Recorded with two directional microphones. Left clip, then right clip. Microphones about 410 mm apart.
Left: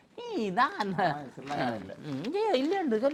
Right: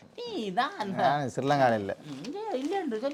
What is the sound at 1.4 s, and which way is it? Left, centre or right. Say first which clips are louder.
Speech: right 13 dB; right.